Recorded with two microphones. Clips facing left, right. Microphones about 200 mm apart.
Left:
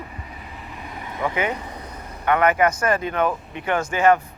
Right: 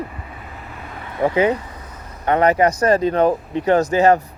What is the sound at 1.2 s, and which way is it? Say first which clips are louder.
Speech: right 8 dB; 35° right (ahead or behind).